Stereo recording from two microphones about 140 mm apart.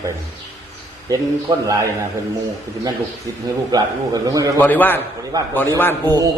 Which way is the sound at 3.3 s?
25° right (ahead or behind).